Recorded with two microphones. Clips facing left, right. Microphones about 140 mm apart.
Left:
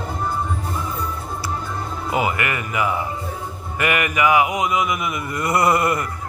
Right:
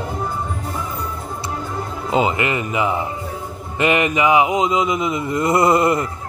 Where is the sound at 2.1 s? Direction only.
20° right (ahead or behind).